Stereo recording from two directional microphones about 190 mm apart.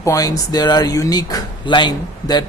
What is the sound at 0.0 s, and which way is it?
A man's voice, 15° left (ahead or behind).